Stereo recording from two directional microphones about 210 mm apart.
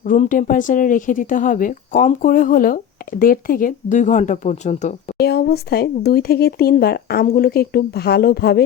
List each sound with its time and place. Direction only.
0.0 s speech: 40° left (ahead or behind)
5.1 s speech: 50° left (ahead or behind)